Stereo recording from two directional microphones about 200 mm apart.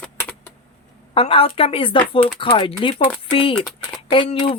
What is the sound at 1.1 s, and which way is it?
A woman's voice, 30° left (ahead or behind).